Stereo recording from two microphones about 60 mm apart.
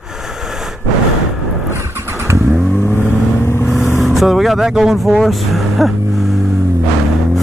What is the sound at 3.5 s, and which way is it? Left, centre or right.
Vehicle, left.